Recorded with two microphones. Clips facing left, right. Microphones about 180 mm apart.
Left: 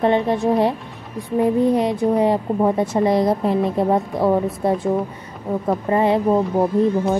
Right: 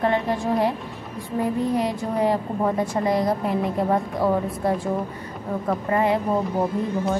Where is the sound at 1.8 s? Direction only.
20° left (ahead or behind).